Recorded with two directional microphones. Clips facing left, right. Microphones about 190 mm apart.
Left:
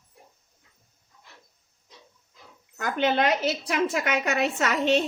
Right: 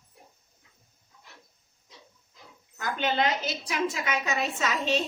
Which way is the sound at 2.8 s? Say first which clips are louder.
Left 4 dB; 65° left (ahead or behind).